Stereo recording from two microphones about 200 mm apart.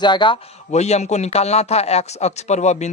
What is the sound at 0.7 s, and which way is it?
Speech, 35° left (ahead or behind).